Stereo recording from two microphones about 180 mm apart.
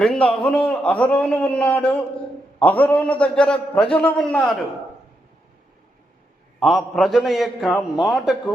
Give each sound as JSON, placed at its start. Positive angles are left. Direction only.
{"t": 0.0, "sound": "a man's voice", "side_deg": 5}
{"t": 6.6, "sound": "a man's voice", "side_deg": 0}